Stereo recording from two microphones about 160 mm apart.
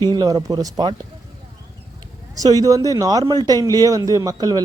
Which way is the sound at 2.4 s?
20° right (ahead or behind).